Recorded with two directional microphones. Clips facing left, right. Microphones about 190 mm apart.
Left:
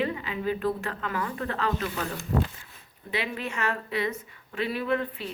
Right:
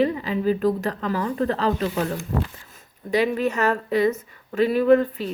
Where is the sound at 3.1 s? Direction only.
40° right (ahead or behind).